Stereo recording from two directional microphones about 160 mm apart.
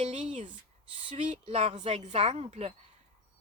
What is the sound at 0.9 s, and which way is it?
Speech, 30° right (ahead or behind).